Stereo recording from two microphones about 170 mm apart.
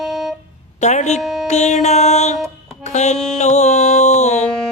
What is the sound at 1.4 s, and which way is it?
Music, 45° left (ahead or behind).